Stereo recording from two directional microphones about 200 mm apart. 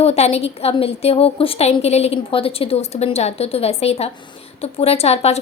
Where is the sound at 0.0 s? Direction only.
30° left (ahead or behind).